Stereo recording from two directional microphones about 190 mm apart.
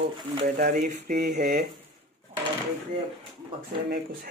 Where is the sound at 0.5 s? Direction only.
50° right (ahead or behind).